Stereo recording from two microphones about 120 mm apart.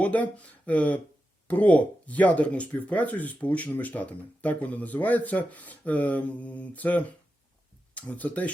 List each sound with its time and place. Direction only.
0.0 s speech: 10° left (ahead or behind)